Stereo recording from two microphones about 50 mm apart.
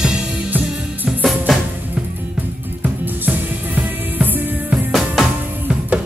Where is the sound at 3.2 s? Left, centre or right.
Right.